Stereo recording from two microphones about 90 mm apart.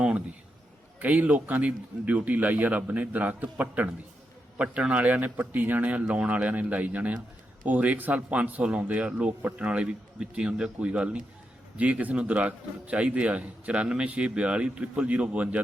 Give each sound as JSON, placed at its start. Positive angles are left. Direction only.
{"t": 0.9, "sound": "a man's voice", "side_deg": -15}